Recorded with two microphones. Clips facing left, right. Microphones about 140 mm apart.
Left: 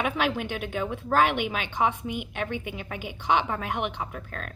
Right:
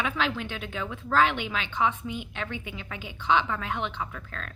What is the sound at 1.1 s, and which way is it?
Speech, 15° left (ahead or behind).